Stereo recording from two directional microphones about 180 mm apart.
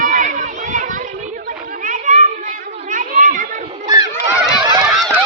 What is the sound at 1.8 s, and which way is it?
Children playing, 45° right (ahead or behind).